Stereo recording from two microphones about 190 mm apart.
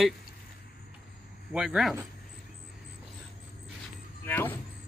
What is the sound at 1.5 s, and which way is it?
Speech, 5° right (ahead or behind).